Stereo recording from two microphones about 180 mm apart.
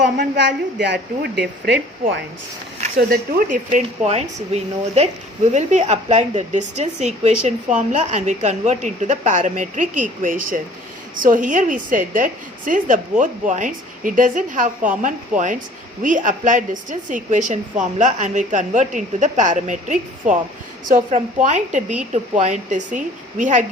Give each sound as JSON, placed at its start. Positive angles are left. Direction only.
{"t": 0.3, "sound": "a woman's voice", "side_deg": -75}
{"t": 3.1, "sound": "a woman's voice", "side_deg": -50}